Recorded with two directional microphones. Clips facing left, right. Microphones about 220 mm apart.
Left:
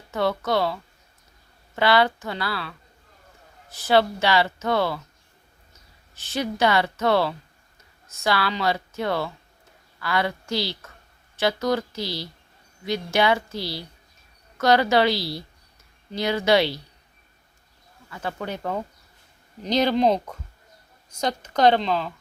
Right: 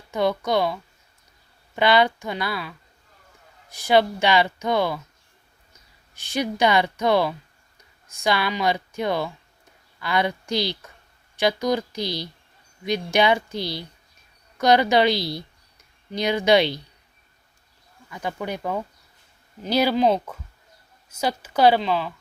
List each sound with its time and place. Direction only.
0.1 s speech: 15° right (ahead or behind)
3.8 s speech: 15° right (ahead or behind)
6.1 s speech: 15° right (ahead or behind)
18.1 s speech: 15° right (ahead or behind)